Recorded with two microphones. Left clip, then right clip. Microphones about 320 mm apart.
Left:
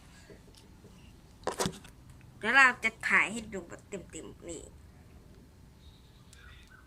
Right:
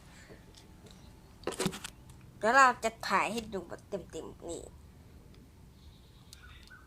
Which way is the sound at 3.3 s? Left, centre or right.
Centre.